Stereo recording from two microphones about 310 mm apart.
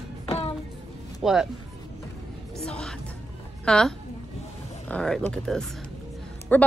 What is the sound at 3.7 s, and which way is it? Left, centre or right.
A woman's voice, centre.